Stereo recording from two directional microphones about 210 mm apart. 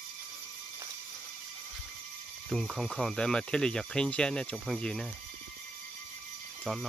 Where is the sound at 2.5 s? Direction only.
Centre (ahead or behind).